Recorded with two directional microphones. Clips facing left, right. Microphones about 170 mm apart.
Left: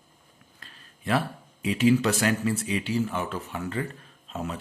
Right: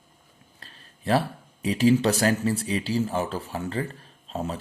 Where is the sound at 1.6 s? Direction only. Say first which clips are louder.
Right 1 dB; 35° right (ahead or behind).